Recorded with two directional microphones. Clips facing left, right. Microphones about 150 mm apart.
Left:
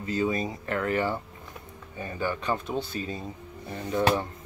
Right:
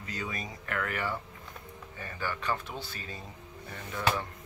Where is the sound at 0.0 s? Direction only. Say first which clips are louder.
Left 11 dB; 30° left (ahead or behind).